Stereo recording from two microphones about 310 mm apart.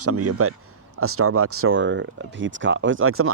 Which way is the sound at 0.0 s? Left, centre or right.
Right.